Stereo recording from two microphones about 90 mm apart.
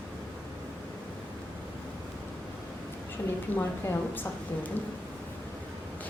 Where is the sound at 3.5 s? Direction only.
25° left (ahead or behind).